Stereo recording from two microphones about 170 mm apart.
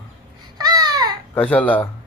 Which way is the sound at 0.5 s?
25° right (ahead or behind).